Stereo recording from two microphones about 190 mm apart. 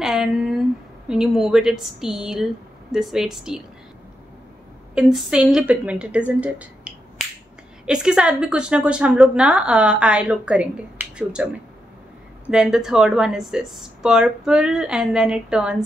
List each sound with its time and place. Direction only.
0.0 s speech: centre (ahead or behind)
4.9 s a woman's voice: centre (ahead or behind)
12.4 s speech: 5° right (ahead or behind)